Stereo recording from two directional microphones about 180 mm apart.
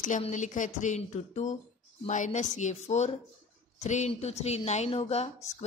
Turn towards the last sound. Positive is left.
turn(degrees=35)  # may be behind; listen again after turning